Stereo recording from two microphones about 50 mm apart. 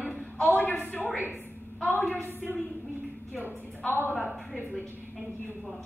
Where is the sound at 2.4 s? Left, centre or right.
Centre.